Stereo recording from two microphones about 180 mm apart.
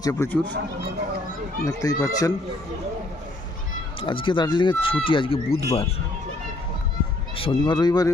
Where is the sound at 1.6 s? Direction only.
20° left (ahead or behind).